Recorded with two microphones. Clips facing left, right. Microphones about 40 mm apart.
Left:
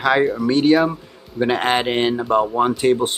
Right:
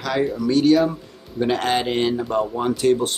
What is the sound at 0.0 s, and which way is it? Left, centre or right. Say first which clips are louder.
Speech: left 5 dB; left.